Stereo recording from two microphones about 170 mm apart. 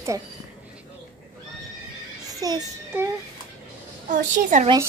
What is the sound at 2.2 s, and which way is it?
Child singing, 20° right (ahead or behind).